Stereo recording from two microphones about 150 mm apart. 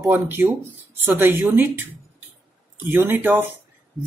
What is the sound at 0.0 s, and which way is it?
Speech, 10° right (ahead or behind).